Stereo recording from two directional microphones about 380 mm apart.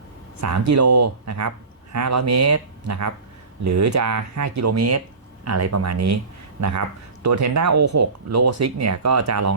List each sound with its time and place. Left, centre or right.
0.4 s speech: right